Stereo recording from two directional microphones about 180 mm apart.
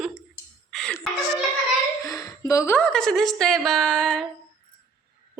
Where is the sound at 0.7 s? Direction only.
Centre (ahead or behind).